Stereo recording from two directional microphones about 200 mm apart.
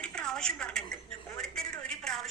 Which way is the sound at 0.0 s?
5° left (ahead or behind).